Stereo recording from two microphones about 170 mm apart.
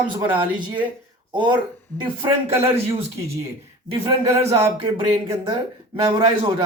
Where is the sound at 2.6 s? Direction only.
35° right (ahead or behind).